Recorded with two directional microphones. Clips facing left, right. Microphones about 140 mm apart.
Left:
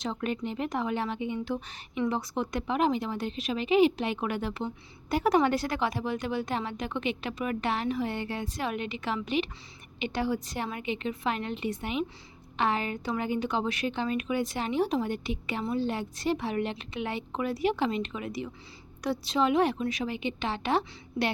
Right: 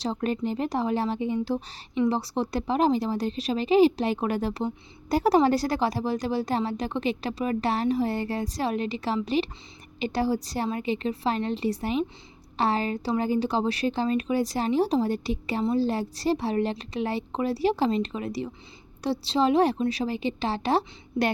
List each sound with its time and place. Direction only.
0.0 s speech: 35° right (ahead or behind)